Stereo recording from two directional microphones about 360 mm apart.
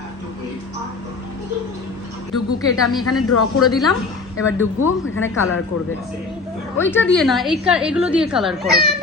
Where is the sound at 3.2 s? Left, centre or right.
Left.